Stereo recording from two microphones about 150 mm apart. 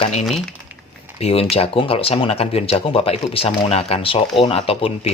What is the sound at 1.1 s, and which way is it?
Speech, 40° left (ahead or behind).